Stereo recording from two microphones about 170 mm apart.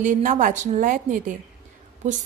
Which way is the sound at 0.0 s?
50° right (ahead or behind).